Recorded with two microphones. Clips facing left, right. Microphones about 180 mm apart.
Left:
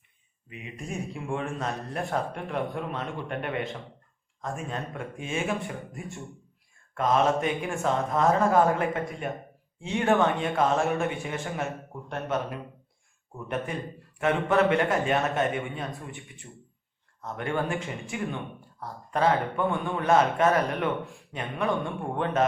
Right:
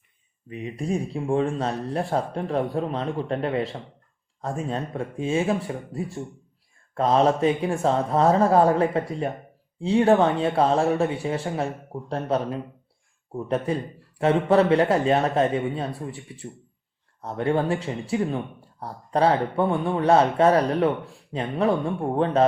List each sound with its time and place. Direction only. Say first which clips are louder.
0.4 s speech: right 9 dB; 35° right (ahead or behind)